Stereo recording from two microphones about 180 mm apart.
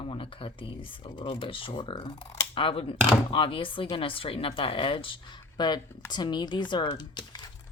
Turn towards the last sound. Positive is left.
turn(degrees=25)  # may be behind; listen again after turning